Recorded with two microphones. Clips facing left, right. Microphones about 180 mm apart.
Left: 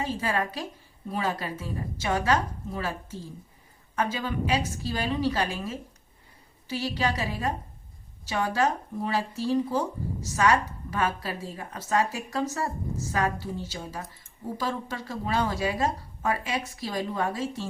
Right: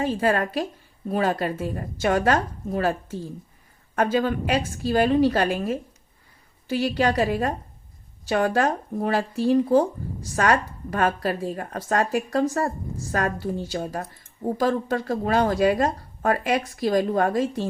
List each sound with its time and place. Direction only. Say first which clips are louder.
0.0 s a woman's voice: right 6 dB; 50° right (ahead or behind)